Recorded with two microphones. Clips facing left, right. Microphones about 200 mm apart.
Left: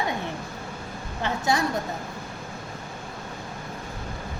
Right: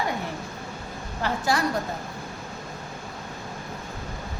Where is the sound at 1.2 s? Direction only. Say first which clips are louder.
Even; 25° left (ahead or behind).